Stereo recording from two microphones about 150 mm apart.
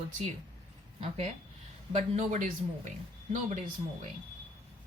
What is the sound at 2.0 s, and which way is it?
Speech, 50° right (ahead or behind).